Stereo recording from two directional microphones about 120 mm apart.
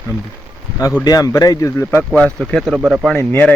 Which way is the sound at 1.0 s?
30° left (ahead or behind).